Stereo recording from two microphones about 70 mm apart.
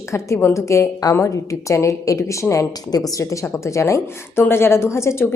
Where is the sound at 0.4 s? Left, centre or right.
Left.